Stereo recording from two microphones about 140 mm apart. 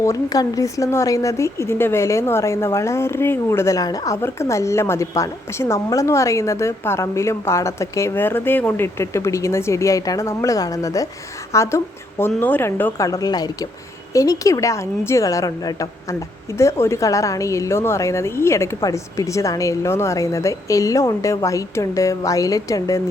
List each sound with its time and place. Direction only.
0.0 s speech: 25° left (ahead or behind)